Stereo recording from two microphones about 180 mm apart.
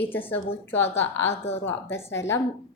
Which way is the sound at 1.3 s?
35° left (ahead or behind).